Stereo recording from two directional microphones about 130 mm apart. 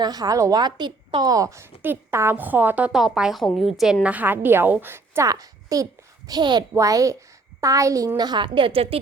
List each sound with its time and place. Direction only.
0.0 s a woman's voice: 30° right (ahead or behind); by 3.7 s centre (ahead or behind)
4.0 s a woman's voice: 10° right (ahead or behind); by 9.0 s 45° right (ahead or behind)